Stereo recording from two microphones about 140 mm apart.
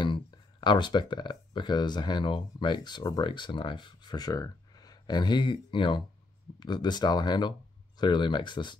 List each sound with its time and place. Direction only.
0.0 s speech: 35° left (ahead or behind)